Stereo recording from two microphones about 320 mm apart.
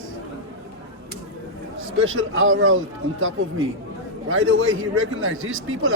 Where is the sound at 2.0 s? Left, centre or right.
Right.